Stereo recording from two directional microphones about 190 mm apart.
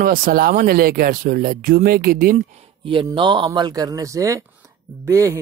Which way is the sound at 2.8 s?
25° right (ahead or behind).